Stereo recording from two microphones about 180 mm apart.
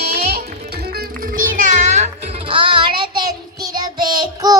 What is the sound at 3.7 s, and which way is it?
Child singing, 25° right (ahead or behind).